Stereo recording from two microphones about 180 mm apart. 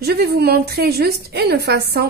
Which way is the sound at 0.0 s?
60° right (ahead or behind).